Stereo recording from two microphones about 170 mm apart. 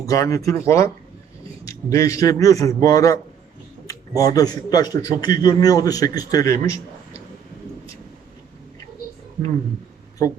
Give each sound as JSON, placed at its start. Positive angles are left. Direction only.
{"t": 0.0, "sound": "a man's voice", "side_deg": 20}